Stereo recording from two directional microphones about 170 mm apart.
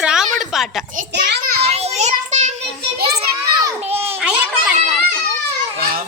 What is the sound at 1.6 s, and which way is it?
Child singing, 40° right (ahead or behind).